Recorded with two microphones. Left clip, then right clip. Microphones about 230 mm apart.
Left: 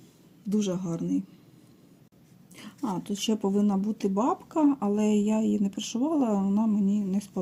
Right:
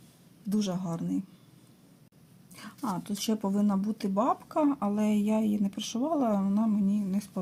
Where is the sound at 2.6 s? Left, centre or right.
Centre.